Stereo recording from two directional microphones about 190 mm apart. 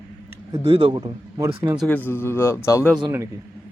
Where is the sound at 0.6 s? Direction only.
30° right (ahead or behind).